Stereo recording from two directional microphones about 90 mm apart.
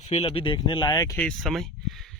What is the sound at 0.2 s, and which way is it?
Speech, 85° left.